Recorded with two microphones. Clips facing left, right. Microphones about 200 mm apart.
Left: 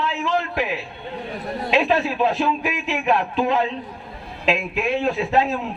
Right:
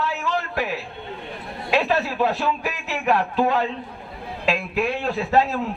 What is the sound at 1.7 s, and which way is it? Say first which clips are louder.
A man's voice: left 2 dB; 20° left (ahead or behind).